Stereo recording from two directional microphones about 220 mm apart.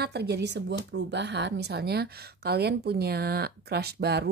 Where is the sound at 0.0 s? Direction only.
50° right (ahead or behind).